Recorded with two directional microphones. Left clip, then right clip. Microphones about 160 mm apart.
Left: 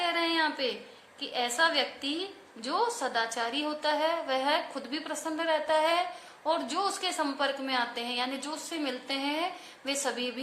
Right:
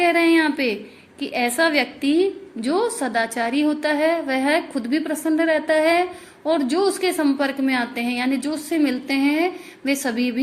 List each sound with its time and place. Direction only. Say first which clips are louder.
0.0 s a woman's voice: right 11 dB; 30° right (ahead or behind)